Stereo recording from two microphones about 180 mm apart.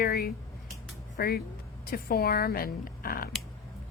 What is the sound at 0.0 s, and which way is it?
Speech, 60° left (ahead or behind).